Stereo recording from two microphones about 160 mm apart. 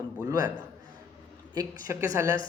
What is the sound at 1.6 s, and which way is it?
Speech, 20° right (ahead or behind).